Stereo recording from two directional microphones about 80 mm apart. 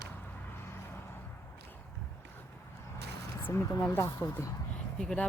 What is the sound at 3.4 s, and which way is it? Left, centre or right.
Speech, left.